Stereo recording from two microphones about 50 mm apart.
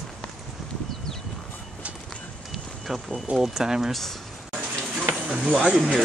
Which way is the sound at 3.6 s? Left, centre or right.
Centre.